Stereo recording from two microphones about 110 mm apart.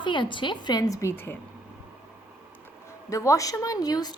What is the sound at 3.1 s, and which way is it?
A woman's voice, 30° left (ahead or behind).